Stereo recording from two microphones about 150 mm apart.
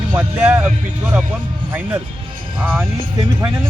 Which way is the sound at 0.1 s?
10° right (ahead or behind).